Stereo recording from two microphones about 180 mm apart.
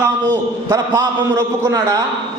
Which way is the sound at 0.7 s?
15° right (ahead or behind).